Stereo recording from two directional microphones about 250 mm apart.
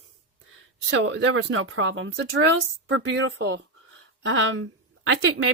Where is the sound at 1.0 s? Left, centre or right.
Right.